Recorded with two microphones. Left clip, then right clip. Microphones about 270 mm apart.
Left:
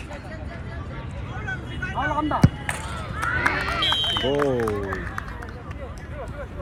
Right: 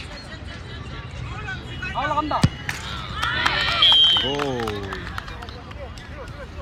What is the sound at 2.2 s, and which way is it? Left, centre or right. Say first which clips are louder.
Speech: even; right.